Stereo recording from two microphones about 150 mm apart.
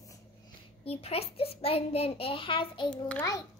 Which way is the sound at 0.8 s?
40° left (ahead or behind).